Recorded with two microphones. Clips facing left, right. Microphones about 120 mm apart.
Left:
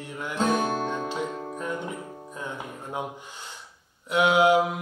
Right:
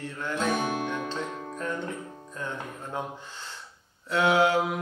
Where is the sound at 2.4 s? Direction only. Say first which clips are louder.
Right 1 dB; 15° left (ahead or behind).